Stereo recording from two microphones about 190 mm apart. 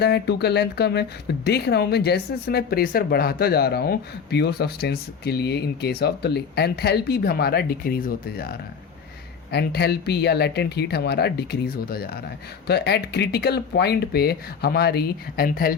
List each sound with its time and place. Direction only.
0.0 s speech: 60° left (ahead or behind)